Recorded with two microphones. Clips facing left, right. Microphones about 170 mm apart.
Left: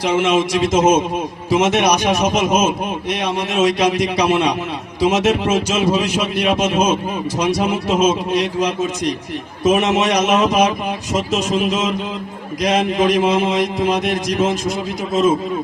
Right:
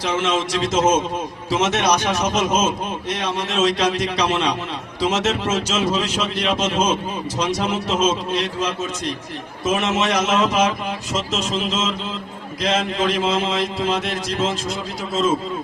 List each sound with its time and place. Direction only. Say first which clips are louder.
0.0 s a man's voice: left 5 dB; 15° left (ahead or behind)